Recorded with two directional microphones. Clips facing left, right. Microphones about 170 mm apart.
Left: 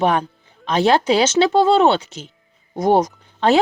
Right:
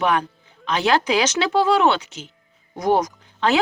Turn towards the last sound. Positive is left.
turn(degrees=30)  # may be behind; listen again after turning